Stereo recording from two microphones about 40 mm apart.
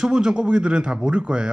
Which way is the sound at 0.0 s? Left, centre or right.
Right.